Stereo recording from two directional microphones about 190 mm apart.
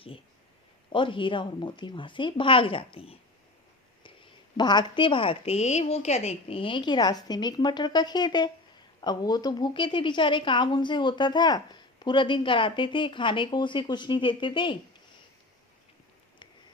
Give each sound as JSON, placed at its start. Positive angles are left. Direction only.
{"t": 0.9, "sound": "a woman's voice", "side_deg": 25}
{"t": 4.5, "sound": "a woman's voice", "side_deg": 25}